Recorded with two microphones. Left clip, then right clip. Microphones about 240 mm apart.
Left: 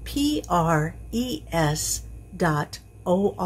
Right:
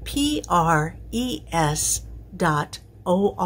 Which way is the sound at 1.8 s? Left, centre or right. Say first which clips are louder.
Right 3 dB; centre.